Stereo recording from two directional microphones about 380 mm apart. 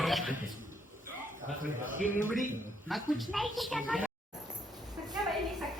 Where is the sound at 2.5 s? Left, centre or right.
Centre.